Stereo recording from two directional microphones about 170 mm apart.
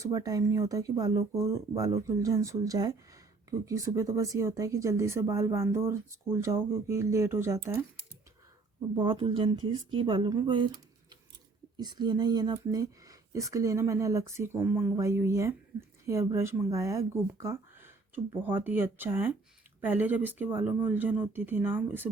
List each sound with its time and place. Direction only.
0.0 s speech: 20° right (ahead or behind)
9.0 s speech: 30° right (ahead or behind)
11.8 s speech: 25° right (ahead or behind)